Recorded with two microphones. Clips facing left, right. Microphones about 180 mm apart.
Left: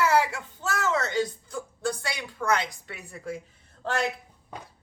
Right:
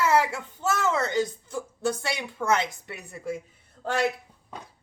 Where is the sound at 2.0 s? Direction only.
25° right (ahead or behind).